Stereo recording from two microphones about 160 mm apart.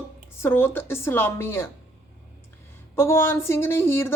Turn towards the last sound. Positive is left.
turn(degrees=15)  # may be behind; listen again after turning